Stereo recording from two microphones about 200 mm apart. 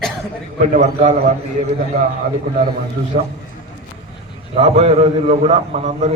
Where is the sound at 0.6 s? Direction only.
40° right (ahead or behind).